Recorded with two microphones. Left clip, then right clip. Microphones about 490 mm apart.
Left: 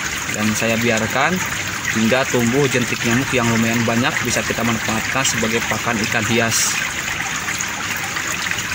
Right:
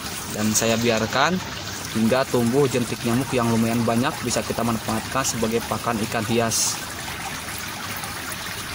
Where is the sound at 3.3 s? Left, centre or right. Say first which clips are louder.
Left 5 dB; right.